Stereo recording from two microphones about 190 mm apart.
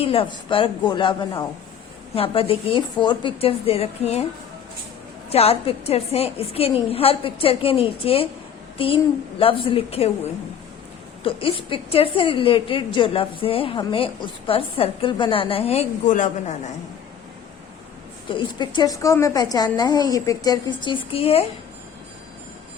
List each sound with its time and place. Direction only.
0.0 s a woman's voice: 30° left (ahead or behind)
5.3 s a woman's voice: 30° left (ahead or behind)
11.2 s a woman's voice: 30° left (ahead or behind)
18.3 s a woman's voice: 25° left (ahead or behind)